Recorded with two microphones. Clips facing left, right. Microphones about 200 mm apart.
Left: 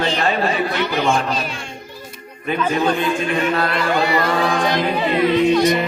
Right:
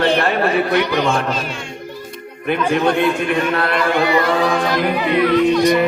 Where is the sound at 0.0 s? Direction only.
60° right (ahead or behind).